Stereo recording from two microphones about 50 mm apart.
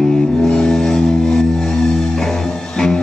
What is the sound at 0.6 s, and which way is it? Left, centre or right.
Music, centre.